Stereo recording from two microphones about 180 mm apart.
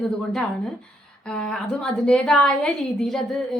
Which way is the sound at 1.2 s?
5° left (ahead or behind).